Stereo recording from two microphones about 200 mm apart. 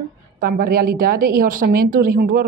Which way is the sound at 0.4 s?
45° right (ahead or behind).